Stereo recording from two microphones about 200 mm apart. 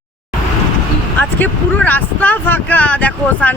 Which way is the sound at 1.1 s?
10° left (ahead or behind).